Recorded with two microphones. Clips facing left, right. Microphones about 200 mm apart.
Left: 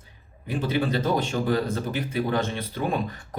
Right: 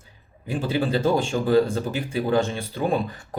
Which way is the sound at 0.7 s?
30° right (ahead or behind).